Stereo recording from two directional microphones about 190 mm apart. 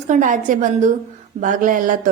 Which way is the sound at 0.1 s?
45° right (ahead or behind).